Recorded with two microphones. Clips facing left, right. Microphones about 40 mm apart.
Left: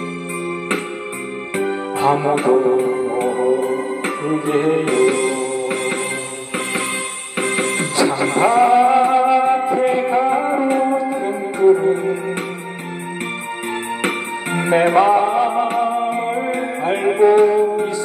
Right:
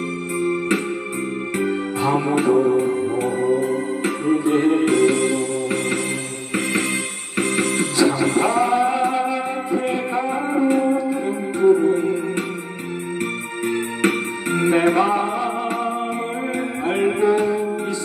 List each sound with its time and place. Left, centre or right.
2.0 s music: left
14.0 s music: left